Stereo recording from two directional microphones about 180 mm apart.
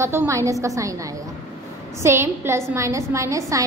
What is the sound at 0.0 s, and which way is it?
Speech, 15° right (ahead or behind).